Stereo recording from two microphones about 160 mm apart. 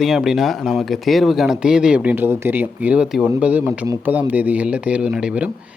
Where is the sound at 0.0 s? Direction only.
Centre (ahead or behind).